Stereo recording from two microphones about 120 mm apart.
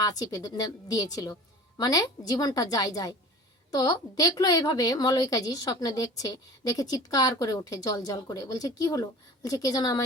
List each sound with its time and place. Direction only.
0.0 s a woman's voice: 30° left (ahead or behind)